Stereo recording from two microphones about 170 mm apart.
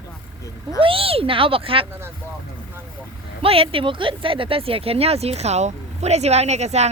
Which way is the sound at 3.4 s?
35° right (ahead or behind).